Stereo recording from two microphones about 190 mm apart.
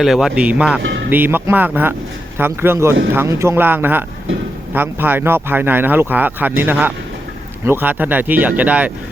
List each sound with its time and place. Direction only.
0.0 s speech: centre (ahead or behind)
0.8 s music: 75° right (ahead or behind)
1.1 s speech: 10° right (ahead or behind)